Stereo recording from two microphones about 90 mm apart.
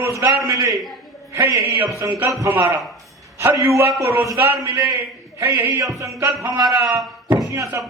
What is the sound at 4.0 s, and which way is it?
A man's voice, 25° right (ahead or behind).